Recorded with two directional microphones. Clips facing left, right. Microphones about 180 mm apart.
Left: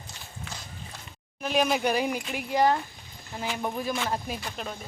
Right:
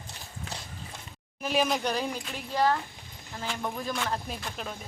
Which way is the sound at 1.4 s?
Centre (ahead or behind).